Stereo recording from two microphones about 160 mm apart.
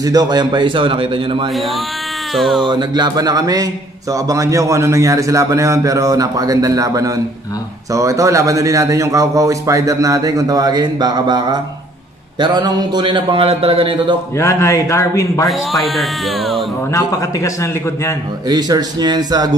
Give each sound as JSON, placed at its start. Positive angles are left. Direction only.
{"t": 0.0, "sound": "a man's voice", "side_deg": -25}
{"t": 1.5, "sound": "speech", "side_deg": 0}
{"t": 2.6, "sound": "a man's voice", "side_deg": -25}
{"t": 14.3, "sound": "a man's voice", "side_deg": 20}
{"t": 15.5, "sound": "speech", "side_deg": 0}
{"t": 16.9, "sound": "a man's voice", "side_deg": 20}
{"t": 18.5, "sound": "a man's voice", "side_deg": -25}